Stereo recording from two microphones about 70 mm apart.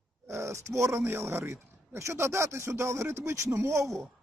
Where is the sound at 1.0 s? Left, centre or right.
Right.